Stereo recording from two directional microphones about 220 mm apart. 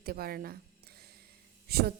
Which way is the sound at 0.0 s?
45° right (ahead or behind).